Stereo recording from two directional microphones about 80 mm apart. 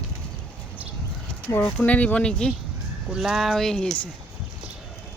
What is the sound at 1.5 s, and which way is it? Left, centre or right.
Speech, left.